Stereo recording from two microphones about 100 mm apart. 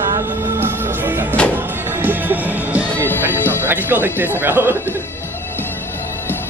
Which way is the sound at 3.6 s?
20° right (ahead or behind).